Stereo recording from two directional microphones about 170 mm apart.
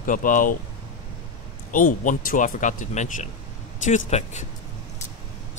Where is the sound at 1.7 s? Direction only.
50° left (ahead or behind).